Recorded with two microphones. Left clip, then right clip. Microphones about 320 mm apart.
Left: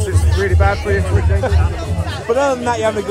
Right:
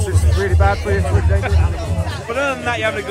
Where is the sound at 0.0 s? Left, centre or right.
Centre.